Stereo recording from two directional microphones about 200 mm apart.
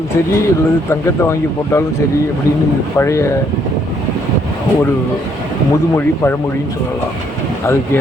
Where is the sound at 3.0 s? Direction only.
10° left (ahead or behind).